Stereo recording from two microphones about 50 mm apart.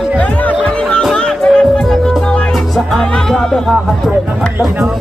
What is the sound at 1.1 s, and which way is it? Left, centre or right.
Music, centre.